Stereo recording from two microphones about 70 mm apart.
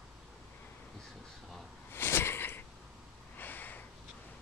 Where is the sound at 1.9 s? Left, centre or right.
Left.